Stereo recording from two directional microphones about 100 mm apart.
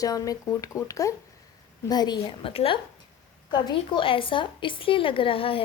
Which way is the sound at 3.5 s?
50° left (ahead or behind).